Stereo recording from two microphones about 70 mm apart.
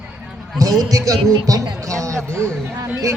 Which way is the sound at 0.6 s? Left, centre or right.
Right.